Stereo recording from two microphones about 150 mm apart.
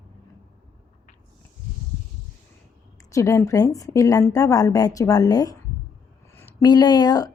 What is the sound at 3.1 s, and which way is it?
A woman's voice, 20° left (ahead or behind).